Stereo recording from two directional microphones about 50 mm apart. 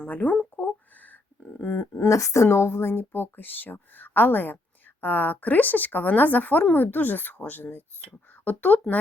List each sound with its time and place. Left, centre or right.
0.0 s speech: left
0.5 s a sound: left
1.5 s speech: left